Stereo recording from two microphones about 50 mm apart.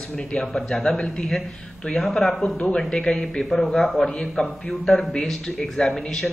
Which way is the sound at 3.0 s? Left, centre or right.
Centre.